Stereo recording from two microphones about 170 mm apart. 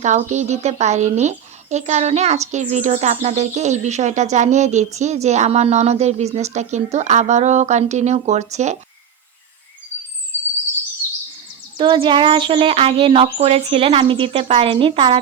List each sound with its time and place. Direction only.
0.0 s a woman's voice: 45° right (ahead or behind)
11.8 s a woman's voice: 30° right (ahead or behind)